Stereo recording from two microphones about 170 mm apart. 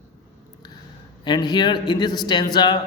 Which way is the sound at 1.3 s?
25° left (ahead or behind).